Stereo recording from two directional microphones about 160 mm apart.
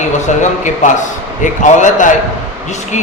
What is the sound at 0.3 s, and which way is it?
A man's voice, 50° left (ahead or behind).